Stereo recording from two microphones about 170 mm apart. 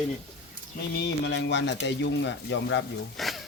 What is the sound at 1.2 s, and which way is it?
Speech, 90° left.